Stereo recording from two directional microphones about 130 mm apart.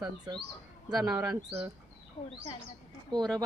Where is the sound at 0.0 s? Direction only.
35° right (ahead or behind).